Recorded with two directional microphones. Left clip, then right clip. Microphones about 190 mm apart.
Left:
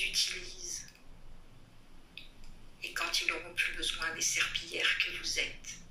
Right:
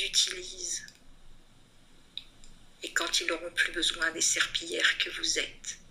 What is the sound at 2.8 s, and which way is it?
Speech, 45° right (ahead or behind).